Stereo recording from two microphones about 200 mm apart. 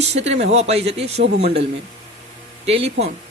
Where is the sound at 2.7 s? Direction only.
30° right (ahead or behind).